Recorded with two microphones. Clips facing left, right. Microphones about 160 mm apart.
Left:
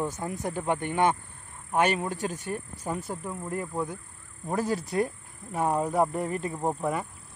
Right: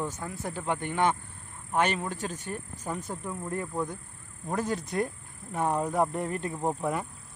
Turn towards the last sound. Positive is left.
turn(degrees=0)  # may be behind; listen again after turning